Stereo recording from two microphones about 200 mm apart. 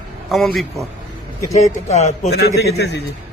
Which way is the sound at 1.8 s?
35° left (ahead or behind).